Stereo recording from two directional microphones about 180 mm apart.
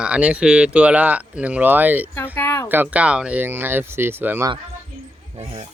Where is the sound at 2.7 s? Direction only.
10° right (ahead or behind).